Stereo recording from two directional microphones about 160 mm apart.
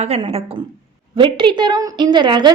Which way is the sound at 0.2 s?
35° right (ahead or behind).